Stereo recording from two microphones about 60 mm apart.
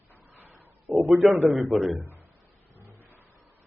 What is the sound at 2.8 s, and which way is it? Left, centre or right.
Vehicle, right.